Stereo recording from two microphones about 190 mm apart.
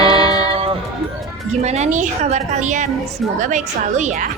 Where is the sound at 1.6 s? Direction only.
35° right (ahead or behind).